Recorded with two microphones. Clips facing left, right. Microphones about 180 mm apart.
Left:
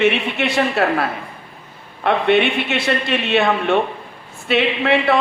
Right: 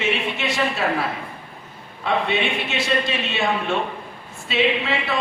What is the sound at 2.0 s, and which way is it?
A woman's voice, 65° left (ahead or behind).